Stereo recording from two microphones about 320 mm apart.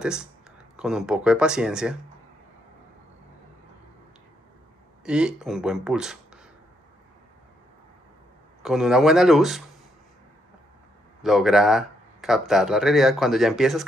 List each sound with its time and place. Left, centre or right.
0.0 s speech: centre
5.0 s speech: centre
8.6 s speech: centre
11.2 s speech: centre